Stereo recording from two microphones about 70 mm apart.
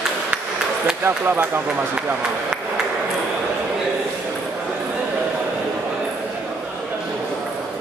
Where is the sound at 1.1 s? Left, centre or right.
Right.